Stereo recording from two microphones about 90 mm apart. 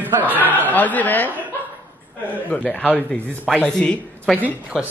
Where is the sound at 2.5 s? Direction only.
10° left (ahead or behind).